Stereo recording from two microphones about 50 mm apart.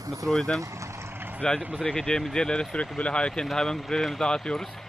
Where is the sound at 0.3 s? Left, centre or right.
Centre.